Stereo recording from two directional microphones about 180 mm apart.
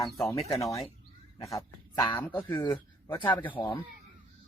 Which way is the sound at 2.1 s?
10° left (ahead or behind).